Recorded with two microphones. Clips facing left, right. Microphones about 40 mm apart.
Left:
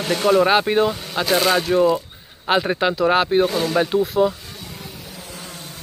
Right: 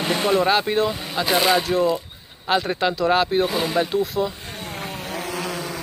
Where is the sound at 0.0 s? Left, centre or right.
Centre.